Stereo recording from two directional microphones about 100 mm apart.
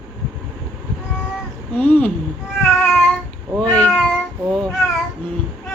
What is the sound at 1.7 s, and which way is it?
Speech, 15° left (ahead or behind).